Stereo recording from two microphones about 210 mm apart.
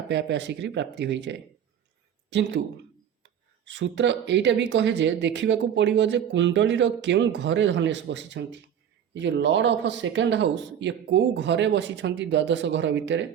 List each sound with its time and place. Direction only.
0.1 s speech: 60° right (ahead or behind)
3.7 s speech: 60° right (ahead or behind)